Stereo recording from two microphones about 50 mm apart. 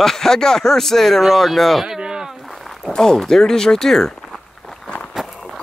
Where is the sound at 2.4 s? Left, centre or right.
Centre.